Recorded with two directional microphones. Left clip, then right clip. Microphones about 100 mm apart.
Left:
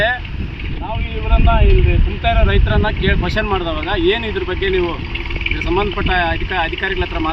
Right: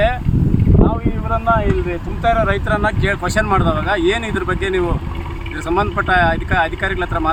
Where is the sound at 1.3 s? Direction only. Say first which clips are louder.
Right 2 dB; 10° right (ahead or behind).